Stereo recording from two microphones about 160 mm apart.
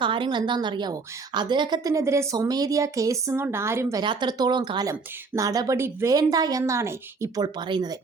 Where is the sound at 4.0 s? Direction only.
30° right (ahead or behind).